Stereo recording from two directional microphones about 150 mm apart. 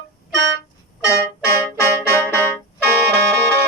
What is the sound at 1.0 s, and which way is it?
Music, 20° left (ahead or behind).